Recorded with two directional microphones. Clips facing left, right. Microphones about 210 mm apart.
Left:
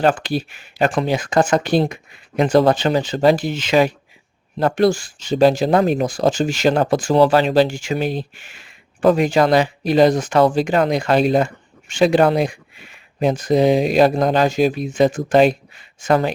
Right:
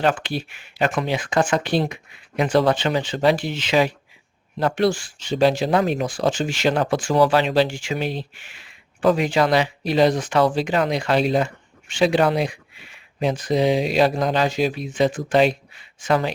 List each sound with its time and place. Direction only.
0.0 s speech: 40° left (ahead or behind)